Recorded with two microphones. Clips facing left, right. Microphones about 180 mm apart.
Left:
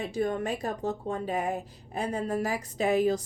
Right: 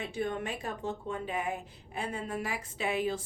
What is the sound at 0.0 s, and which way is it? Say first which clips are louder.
Speech: left 5 dB; 40° left (ahead or behind).